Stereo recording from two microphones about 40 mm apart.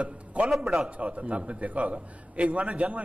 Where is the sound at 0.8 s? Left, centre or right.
Right.